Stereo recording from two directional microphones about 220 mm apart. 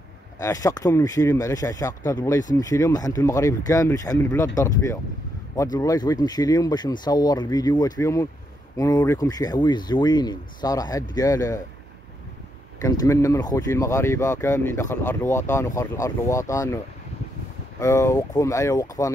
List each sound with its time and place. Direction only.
0.4 s speech: 15° left (ahead or behind)
12.8 s speech: 15° left (ahead or behind)